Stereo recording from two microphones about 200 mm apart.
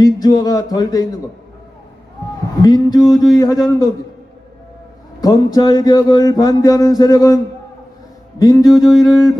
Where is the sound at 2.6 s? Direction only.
20° left (ahead or behind).